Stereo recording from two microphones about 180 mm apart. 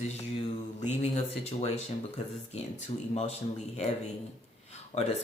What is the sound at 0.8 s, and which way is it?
Speech, 40° left (ahead or behind).